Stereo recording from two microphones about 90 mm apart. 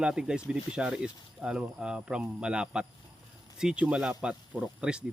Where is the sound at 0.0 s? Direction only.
10° right (ahead or behind).